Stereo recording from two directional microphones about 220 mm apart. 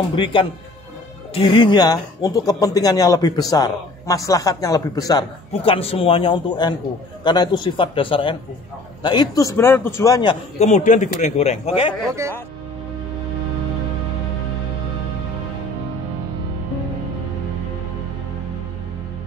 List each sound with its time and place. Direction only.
0.1 s speech: 25° left (ahead or behind)
10.6 s a man's voice: 30° left (ahead or behind)